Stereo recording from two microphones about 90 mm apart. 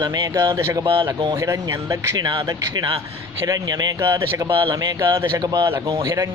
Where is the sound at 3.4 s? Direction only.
40° right (ahead or behind).